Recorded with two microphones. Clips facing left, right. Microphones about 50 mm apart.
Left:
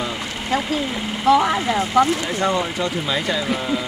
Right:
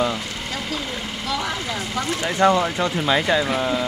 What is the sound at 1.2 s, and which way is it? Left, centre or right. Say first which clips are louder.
Speech: left 11 dB; left.